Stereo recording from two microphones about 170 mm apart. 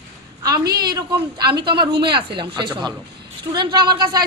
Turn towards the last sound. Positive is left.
turn(degrees=-25)  # may be behind; listen again after turning